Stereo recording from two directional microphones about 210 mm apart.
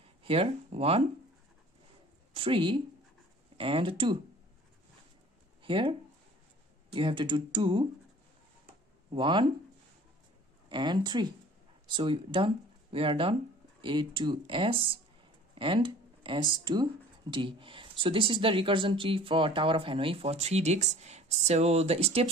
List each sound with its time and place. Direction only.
0.2 s speech: 25° right (ahead or behind)
2.3 s speech: 25° right (ahead or behind)
5.6 s speech: 25° right (ahead or behind)
9.1 s speech: 20° right (ahead or behind)
10.7 s speech: 20° right (ahead or behind)